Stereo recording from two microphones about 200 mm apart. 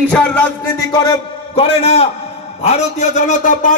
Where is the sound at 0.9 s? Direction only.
20° left (ahead or behind).